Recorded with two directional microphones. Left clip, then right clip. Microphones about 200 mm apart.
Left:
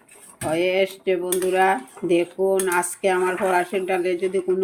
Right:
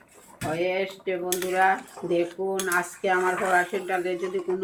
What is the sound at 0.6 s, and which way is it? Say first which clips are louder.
Speech: left 6 dB; 45° left (ahead or behind).